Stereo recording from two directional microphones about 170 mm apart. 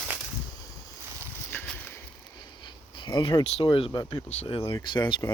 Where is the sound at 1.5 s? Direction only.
5° left (ahead or behind).